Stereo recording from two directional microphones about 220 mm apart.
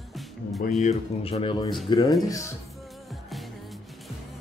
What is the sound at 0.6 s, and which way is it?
Speech, 35° left (ahead or behind).